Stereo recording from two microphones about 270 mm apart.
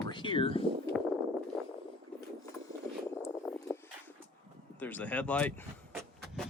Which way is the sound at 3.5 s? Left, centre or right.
Centre.